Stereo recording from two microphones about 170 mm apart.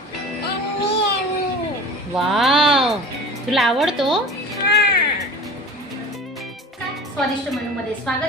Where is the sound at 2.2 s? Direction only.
Centre (ahead or behind).